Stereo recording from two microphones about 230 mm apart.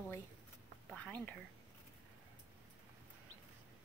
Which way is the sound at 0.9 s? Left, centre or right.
Centre.